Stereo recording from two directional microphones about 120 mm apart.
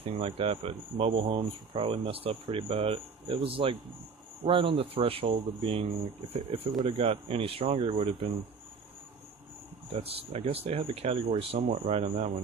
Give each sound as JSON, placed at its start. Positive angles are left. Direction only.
{"t": 0.2, "sound": "speech", "side_deg": -55}
{"t": 6.7, "sound": "speech", "side_deg": -40}
{"t": 7.0, "sound": "speech", "side_deg": -50}
{"t": 9.9, "sound": "speech", "side_deg": -55}